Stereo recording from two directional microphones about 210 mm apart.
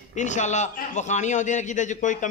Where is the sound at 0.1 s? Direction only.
35° left (ahead or behind).